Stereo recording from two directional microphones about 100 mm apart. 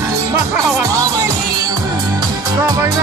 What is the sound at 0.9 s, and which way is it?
Music, 35° right (ahead or behind).